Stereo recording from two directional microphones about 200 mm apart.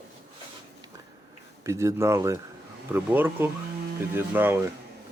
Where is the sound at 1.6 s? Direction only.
15° right (ahead or behind).